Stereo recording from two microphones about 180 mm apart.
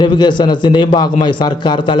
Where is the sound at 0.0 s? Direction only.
25° left (ahead or behind).